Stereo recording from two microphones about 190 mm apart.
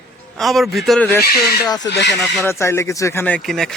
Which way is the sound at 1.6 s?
20° left (ahead or behind).